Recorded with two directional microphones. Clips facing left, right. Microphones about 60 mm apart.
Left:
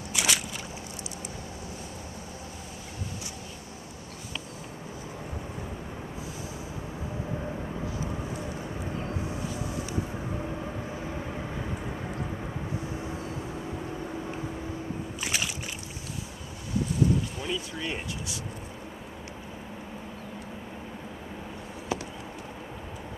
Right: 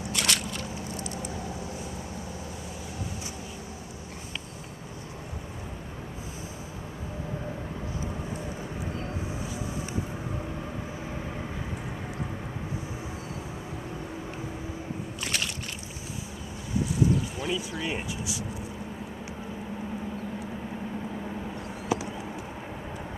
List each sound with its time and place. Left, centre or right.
0.1 s a sound: centre
9.2 s vehicle: centre
11.0 s vehicle: centre
15.2 s slosh: centre
17.4 s speech: centre
21.9 s a sound: centre